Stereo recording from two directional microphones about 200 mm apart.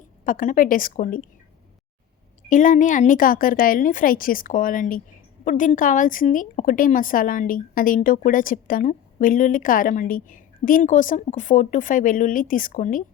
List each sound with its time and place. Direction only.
0.3 s a woman's voice: 45° left (ahead or behind)
2.5 s a woman's voice: 40° left (ahead or behind)